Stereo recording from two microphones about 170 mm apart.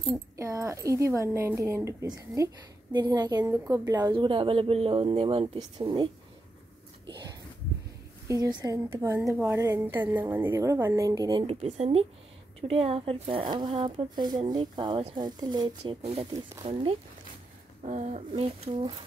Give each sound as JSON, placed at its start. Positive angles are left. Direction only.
{"t": 0.4, "sound": "a woman's voice", "side_deg": -15}
{"t": 7.1, "sound": "a sound", "side_deg": -25}
{"t": 8.3, "sound": "a woman's voice", "side_deg": -20}
{"t": 11.4, "sound": "a woman's voice", "side_deg": -40}
{"t": 16.0, "sound": "speech", "side_deg": -40}
{"t": 16.3, "sound": "a woman's voice", "side_deg": -25}
{"t": 17.8, "sound": "speech", "side_deg": -45}